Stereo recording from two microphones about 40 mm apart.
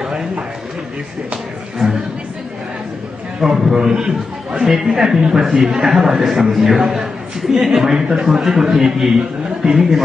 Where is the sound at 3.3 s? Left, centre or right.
Centre.